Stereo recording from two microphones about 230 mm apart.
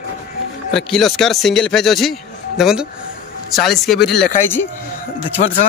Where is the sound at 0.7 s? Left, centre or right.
Centre.